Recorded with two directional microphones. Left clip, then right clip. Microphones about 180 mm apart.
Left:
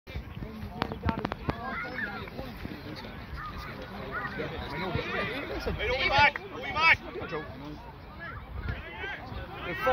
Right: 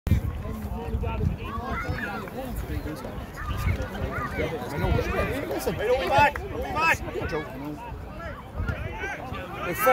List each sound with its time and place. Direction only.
4.1 s speech: 40° right (ahead or behind)